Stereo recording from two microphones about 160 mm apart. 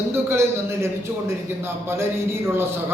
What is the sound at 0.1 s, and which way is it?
A man's voice, 15° right (ahead or behind).